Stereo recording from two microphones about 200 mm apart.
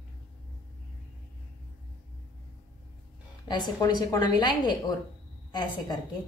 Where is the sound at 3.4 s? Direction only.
20° left (ahead or behind).